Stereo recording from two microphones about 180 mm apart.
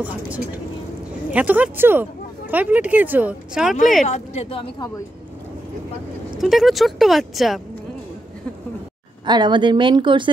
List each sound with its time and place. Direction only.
0.0 s speech: 10° right (ahead or behind)
4.1 s speech: 35° left (ahead or behind)
6.3 s speech: centre (ahead or behind)
9.2 s speech: 25° right (ahead or behind)